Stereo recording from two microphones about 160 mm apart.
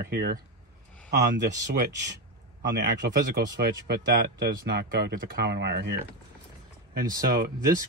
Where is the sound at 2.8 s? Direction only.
60° right (ahead or behind); by 5.9 s 90° right.